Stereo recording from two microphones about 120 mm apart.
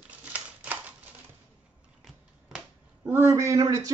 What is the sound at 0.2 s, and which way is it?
Typewriter, 15° right (ahead or behind).